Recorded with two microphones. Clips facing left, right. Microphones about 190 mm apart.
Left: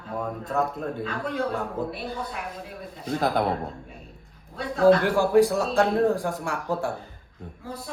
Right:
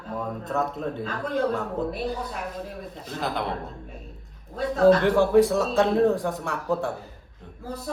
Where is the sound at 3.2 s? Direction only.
45° left (ahead or behind).